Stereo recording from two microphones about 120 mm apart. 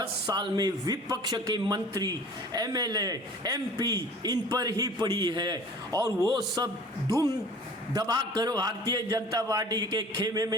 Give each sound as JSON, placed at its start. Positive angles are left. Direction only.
{"t": 0.3, "sound": "a man's voice", "side_deg": -35}